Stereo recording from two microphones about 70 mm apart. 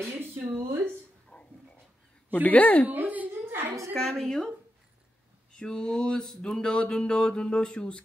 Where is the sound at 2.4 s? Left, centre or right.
Left.